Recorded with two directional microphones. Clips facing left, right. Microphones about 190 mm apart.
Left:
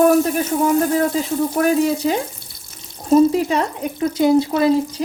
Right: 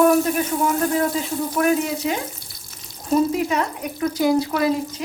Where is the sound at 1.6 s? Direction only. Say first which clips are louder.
Left 3 dB; 35° left (ahead or behind).